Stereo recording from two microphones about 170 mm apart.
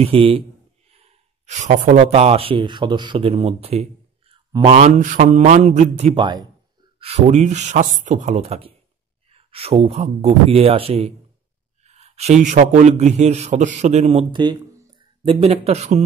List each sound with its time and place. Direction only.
0.0 s a man's voice: 35° right (ahead or behind)
4.3 s a sound: 30° right (ahead or behind)
4.7 s speech: 45° right (ahead or behind); by 6.4 s 30° right (ahead or behind)
7.0 s a man's voice: 40° right (ahead or behind)
14.3 s speech: 25° right (ahead or behind)